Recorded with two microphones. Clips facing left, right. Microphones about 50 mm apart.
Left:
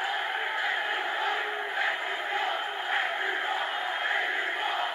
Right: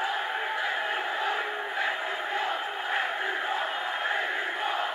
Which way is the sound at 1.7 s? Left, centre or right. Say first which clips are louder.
Even; centre.